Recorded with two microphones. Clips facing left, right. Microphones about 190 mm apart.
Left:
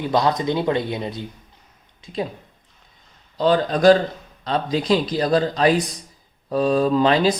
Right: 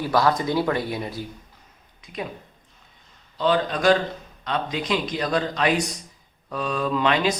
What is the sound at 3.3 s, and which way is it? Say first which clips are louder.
Speech: left 4 dB; 40° left (ahead or behind).